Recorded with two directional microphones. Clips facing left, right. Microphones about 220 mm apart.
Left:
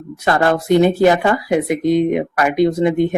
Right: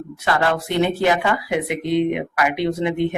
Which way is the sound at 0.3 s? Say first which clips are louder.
Left 6 dB; 45° left (ahead or behind).